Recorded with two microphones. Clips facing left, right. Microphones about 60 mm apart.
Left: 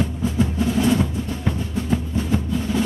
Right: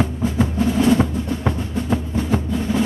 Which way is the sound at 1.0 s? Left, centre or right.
Right.